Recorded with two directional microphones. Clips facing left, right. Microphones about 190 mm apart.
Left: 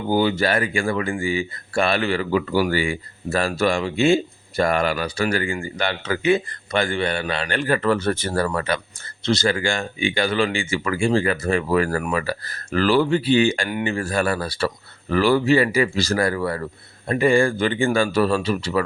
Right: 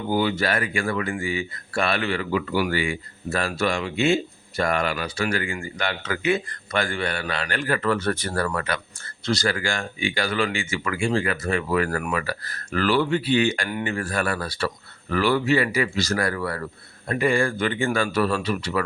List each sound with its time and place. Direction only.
0.1 s speech: 30° left (ahead or behind)